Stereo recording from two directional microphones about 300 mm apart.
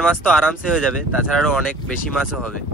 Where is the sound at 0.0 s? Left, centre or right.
Centre.